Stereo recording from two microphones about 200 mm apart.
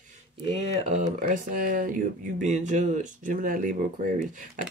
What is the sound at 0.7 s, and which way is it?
Speech, 35° right (ahead or behind).